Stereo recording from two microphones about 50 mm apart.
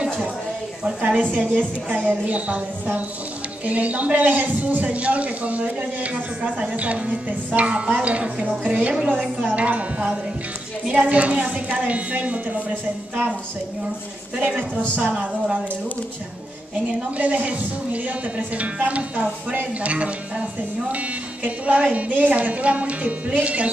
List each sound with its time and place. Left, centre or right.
1.0 s a woman's voice: right
9.5 s a man's voice: right
15.0 s a man's voice: right
17.2 s a man's voice: right